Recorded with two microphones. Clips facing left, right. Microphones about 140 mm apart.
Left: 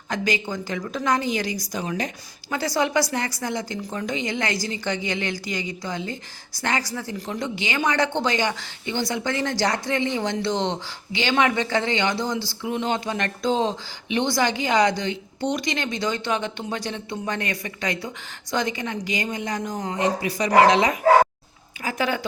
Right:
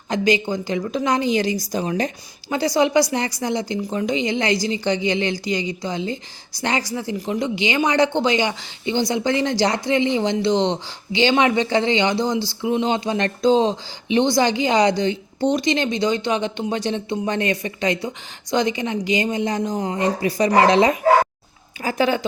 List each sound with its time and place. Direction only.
0.1 s speech: 25° right (ahead or behind)
2.5 s speech: 20° right (ahead or behind)
20.0 s speech: 35° right (ahead or behind)